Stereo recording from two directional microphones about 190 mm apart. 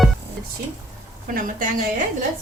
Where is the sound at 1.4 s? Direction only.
45° right (ahead or behind).